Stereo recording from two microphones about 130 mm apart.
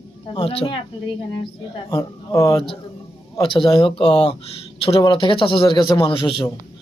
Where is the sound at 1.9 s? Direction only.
25° left (ahead or behind).